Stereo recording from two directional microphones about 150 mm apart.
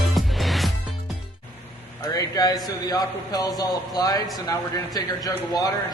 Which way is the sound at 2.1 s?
25° left (ahead or behind).